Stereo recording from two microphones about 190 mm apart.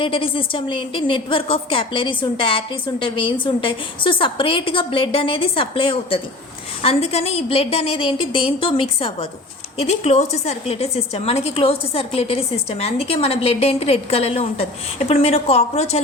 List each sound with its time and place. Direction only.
0.0 s a woman's voice: 30° left (ahead or behind)